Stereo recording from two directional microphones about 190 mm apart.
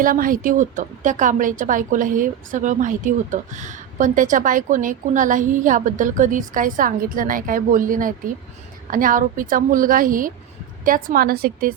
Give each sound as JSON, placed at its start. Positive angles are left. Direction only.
{"t": 0.0, "sound": "a woman's voice", "side_deg": -45}